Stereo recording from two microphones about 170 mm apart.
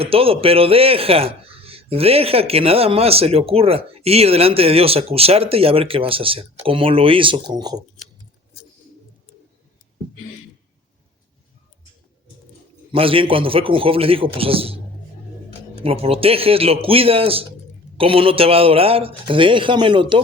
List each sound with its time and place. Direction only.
0.0 s speech: 35° right (ahead or behind)
12.9 s speech: 30° right (ahead or behind)
15.8 s speech: 35° right (ahead or behind)